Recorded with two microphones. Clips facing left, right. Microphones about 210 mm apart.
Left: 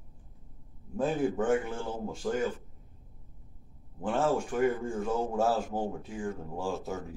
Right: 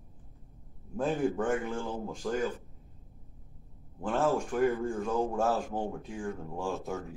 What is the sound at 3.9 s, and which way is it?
Speech, 5° left (ahead or behind).